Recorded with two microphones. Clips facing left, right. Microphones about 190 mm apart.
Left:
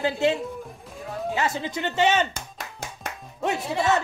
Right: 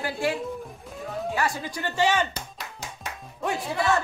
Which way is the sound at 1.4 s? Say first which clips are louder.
Left 4 dB; 20° left (ahead or behind).